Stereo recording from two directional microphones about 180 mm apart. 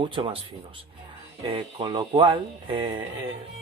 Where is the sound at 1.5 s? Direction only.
30° right (ahead or behind).